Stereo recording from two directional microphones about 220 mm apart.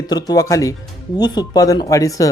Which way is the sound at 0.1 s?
15° left (ahead or behind).